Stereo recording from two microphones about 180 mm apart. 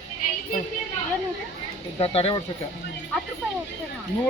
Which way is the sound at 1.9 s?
30° left (ahead or behind).